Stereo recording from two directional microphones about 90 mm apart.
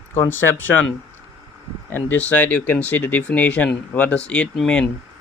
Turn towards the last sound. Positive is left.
turn(degrees=5)  # may be behind; listen again after turning